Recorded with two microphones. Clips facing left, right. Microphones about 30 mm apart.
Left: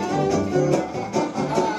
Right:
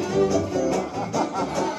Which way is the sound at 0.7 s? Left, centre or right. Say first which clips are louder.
Left 3 dB; centre.